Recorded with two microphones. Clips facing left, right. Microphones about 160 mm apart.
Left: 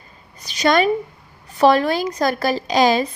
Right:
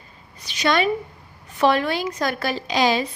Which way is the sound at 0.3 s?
40° left (ahead or behind).